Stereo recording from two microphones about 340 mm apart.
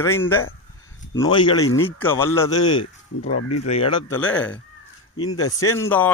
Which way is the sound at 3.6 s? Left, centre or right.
Centre.